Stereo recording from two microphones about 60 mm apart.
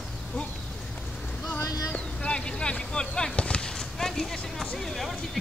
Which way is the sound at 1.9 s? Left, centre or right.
Centre.